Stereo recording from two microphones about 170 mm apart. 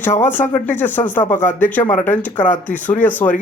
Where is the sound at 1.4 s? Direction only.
10° left (ahead or behind).